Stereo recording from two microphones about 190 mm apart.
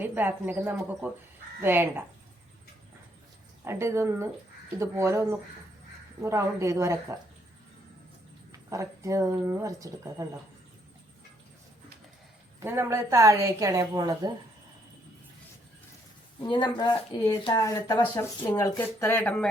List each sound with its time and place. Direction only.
0.0 s a woman's voice: 10° right (ahead or behind)
3.6 s a woman's voice: 15° right (ahead or behind)
8.5 s a woman's voice: 15° right (ahead or behind)
12.5 s a woman's voice: 15° right (ahead or behind)
16.4 s speech: 25° left (ahead or behind); by 19.5 s 5° left (ahead or behind)